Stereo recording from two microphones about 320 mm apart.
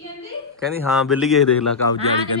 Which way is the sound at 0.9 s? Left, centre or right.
Centre.